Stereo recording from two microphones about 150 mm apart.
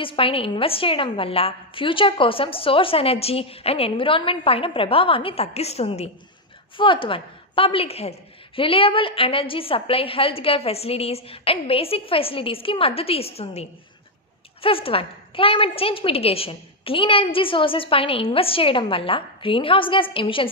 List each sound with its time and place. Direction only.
0.0 s a woman's voice: 35° left (ahead or behind)
6.8 s a woman's voice: 35° left (ahead or behind)